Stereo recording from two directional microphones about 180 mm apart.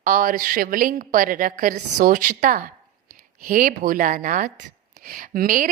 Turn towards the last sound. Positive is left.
turn(degrees=-50)  # may be behind; listen again after turning